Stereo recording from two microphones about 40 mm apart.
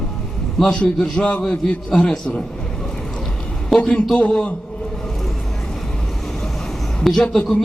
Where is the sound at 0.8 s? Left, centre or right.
Left.